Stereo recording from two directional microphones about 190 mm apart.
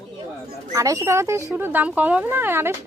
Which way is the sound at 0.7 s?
15° right (ahead or behind).